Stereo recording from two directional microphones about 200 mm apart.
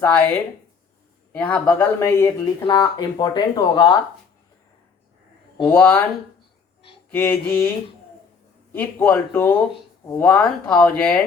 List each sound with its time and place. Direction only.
0.0 s speech: 10° left (ahead or behind)
1.4 s speech: 5° left (ahead or behind)
5.6 s speech: 10° left (ahead or behind)
7.1 s speech: 10° left (ahead or behind)
8.7 s speech: 10° left (ahead or behind)